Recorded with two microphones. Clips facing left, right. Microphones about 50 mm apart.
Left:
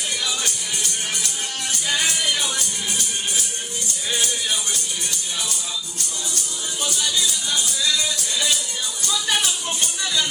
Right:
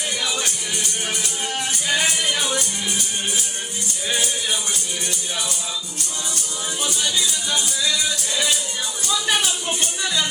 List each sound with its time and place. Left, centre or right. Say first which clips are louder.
0.2 s music: right 1 dB; right
9.2 s speech: right 1 dB; centre